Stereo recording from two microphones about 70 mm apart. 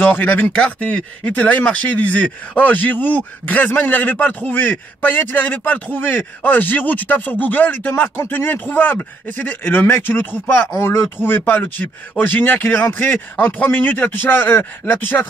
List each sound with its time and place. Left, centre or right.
0.0 s speech: left
0.6 s speech: centre
10.7 s speech: left
11.2 s speech: left